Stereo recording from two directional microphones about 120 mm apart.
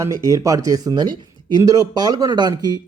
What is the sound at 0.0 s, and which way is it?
Speech, 25° right (ahead or behind).